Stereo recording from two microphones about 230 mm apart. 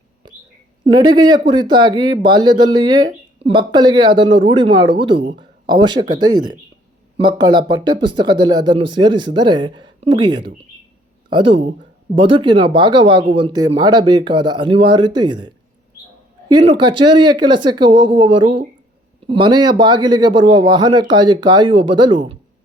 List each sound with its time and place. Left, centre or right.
0.9 s speech: centre